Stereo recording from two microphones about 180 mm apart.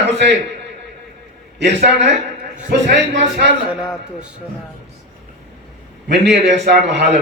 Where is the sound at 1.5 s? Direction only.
70° right (ahead or behind).